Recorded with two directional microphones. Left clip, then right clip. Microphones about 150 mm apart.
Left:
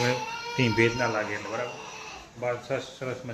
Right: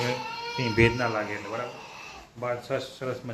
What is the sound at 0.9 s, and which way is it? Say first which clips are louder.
Speech: left 1 dB; 20° right (ahead or behind).